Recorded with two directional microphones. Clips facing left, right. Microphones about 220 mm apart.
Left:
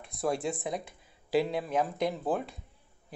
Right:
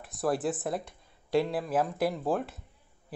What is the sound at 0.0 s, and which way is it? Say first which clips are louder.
A man's voice: right 2 dB; centre (ahead or behind).